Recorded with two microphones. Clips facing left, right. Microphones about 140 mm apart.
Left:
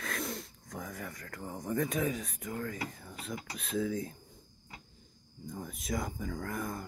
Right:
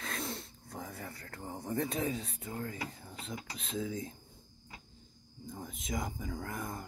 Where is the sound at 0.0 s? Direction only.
25° right (ahead or behind).